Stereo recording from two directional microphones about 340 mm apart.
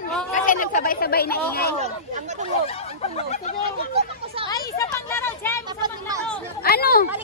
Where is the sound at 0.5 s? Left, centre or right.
Left.